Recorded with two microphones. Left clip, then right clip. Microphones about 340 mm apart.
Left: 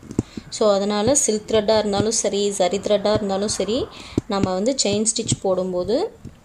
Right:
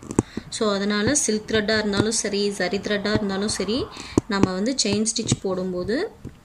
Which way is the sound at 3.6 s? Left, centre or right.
Left.